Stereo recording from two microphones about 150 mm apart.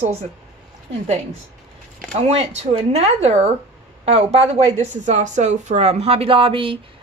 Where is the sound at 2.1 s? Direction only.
45° right (ahead or behind).